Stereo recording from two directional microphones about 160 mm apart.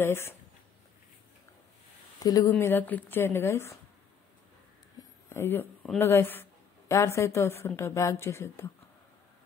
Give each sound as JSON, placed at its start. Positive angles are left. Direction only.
{"t": 0.0, "sound": "a woman's voice", "side_deg": 15}
{"t": 2.2, "sound": "speech", "side_deg": 25}
{"t": 2.5, "sound": "a woman's voice", "side_deg": 10}
{"t": 5.3, "sound": "a woman's voice", "side_deg": 15}